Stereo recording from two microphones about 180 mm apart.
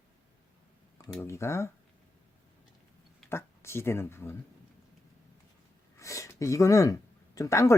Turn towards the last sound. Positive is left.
turn(degrees=15)  # may be behind; listen again after turning